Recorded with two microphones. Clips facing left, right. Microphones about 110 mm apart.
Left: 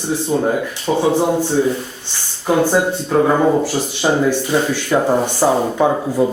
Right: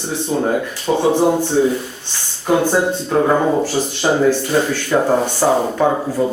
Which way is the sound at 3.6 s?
10° left (ahead or behind).